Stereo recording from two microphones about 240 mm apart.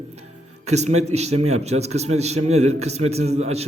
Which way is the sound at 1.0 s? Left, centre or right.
Right.